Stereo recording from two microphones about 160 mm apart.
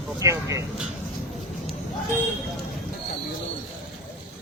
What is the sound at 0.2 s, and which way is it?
Speech, 20° right (ahead or behind).